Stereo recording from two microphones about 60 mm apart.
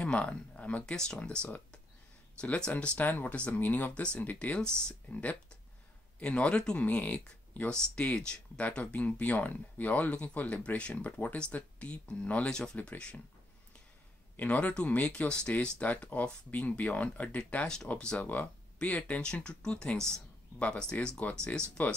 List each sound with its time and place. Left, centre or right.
0.0 s speech: centre
2.7 s speech: left
4.6 s speech: centre
14.3 s speech: left
18.2 s speech: left